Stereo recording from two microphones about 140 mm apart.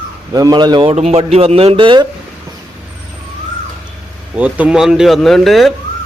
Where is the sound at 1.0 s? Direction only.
45° right (ahead or behind).